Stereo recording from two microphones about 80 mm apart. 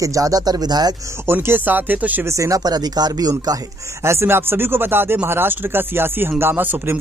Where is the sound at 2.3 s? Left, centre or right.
Right.